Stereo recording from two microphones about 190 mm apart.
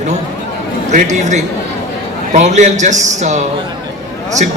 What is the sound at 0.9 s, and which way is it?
A man's voice, 40° right (ahead or behind).